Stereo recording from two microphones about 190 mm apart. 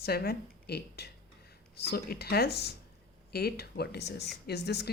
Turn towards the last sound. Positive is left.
turn(degrees=60)  # may be behind; listen again after turning